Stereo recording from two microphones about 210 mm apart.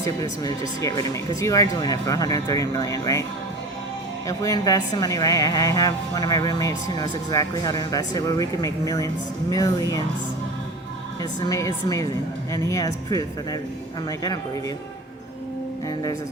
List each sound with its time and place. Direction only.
0.0 s a woman's voice: 15° left (ahead or behind)
4.3 s a woman's voice: 15° left (ahead or behind)
11.2 s a woman's voice: 15° left (ahead or behind)